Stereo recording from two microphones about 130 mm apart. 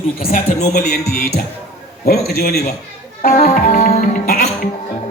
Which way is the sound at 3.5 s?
60° left (ahead or behind).